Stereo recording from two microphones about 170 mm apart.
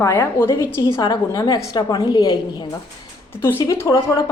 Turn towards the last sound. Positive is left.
turn(degrees=20)  # may be behind; listen again after turning